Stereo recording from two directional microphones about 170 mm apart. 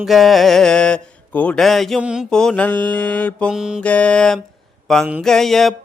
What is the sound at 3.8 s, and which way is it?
Mantra, 5° left (ahead or behind).